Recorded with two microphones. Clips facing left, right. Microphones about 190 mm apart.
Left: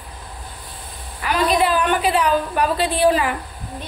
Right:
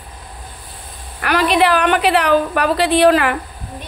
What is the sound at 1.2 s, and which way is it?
A woman's voice, 75° right (ahead or behind).